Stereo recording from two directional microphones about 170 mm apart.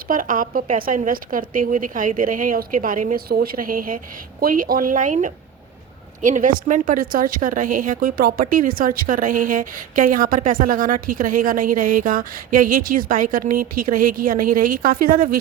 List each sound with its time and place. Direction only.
0.1 s a woman's voice: 55° right (ahead or behind)